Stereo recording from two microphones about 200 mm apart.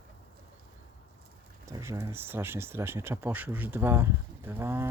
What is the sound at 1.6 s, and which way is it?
Speech, 15° right (ahead or behind).